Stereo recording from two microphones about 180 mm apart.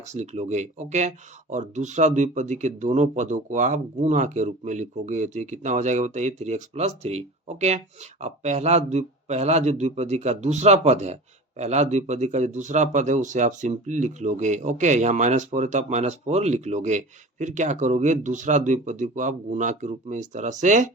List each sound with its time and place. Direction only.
0.0 s speech: 40° right (ahead or behind)